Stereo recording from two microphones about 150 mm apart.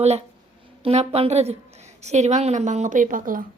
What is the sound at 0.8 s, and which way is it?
A woman's voice, 40° right (ahead or behind).